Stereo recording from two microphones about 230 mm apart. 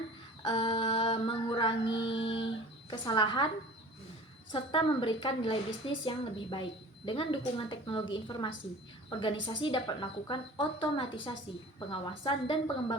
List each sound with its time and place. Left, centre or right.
0.4 s female singing: left
2.0 s a sound: left
4.5 s a woman's voice: left